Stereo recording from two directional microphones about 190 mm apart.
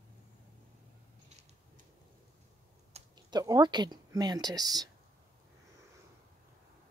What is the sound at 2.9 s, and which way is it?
Speech, 20° right (ahead or behind).